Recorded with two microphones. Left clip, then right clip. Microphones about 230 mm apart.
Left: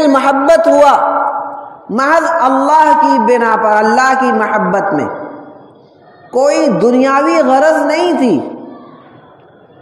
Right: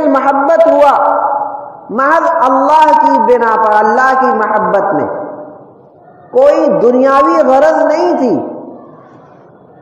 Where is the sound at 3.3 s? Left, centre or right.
Left.